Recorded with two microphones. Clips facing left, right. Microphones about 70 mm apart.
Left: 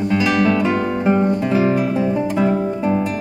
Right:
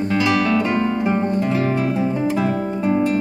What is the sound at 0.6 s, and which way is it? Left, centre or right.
Guitar, centre.